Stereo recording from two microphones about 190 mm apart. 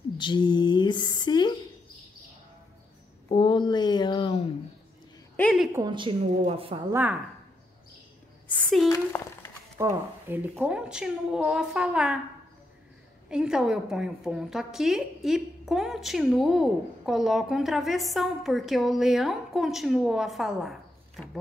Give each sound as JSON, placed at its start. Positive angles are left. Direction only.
{"t": 0.2, "sound": "speech", "side_deg": 25}
{"t": 3.3, "sound": "speech", "side_deg": 25}
{"t": 5.3, "sound": "a sound", "side_deg": 5}
{"t": 5.7, "sound": "a woman's voice", "side_deg": -20}
{"t": 6.9, "sound": "a woman's voice", "side_deg": -10}
{"t": 8.5, "sound": "a sound", "side_deg": 5}
{"t": 8.8, "sound": "speech", "side_deg": 15}
{"t": 9.8, "sound": "a woman's voice", "side_deg": -10}
{"t": 13.3, "sound": "a woman's voice", "side_deg": -5}